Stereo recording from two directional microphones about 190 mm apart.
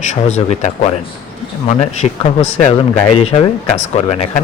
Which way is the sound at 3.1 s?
30° left (ahead or behind).